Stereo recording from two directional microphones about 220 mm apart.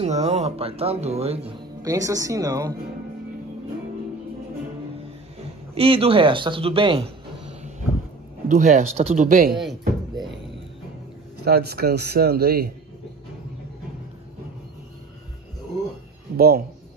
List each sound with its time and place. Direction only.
0.0 s speech: 30° right (ahead or behind)
1.8 s speech: 15° right (ahead or behind)
5.8 s speech: 25° right (ahead or behind)
8.5 s speech: 35° right (ahead or behind)
9.5 s a sound: centre (ahead or behind)
11.4 s a man's voice: 45° right (ahead or behind)
16.3 s speech: 45° right (ahead or behind)